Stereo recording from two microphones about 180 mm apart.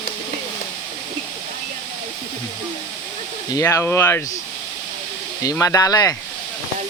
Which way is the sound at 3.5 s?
15° left (ahead or behind).